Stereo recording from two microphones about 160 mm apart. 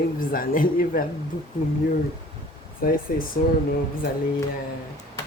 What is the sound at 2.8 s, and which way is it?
Speech, 65° left (ahead or behind).